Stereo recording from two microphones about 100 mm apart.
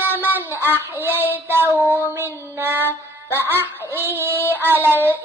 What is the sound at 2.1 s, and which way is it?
Music, 25° right (ahead or behind).